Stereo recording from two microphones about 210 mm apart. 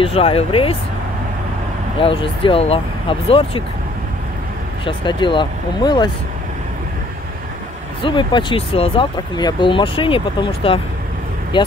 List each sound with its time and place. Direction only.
0.0 s speech: 25° left (ahead or behind)
2.0 s speech: 25° left (ahead or behind)
4.8 s speech: 20° left (ahead or behind)
8.0 s speech: 25° left (ahead or behind)